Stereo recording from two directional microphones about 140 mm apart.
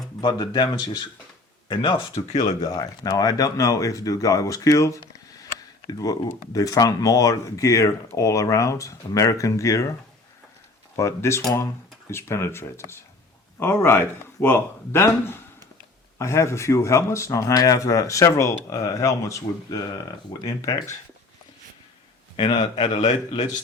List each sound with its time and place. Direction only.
0.2 s speech: 30° left (ahead or behind)
2.5 s speech: 25° left (ahead or behind)
10.9 s speech: 20° left (ahead or behind)
22.4 s speech: 35° left (ahead or behind)